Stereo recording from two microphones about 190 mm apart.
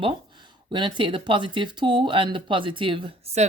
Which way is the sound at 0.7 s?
25° right (ahead or behind).